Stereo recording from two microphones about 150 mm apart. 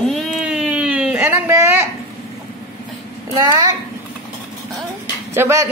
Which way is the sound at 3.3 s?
25° right (ahead or behind).